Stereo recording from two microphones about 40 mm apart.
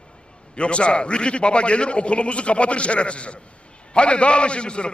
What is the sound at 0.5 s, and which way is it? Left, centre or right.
A man's voice, left.